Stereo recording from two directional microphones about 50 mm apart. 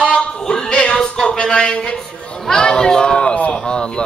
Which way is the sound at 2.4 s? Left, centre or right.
Centre.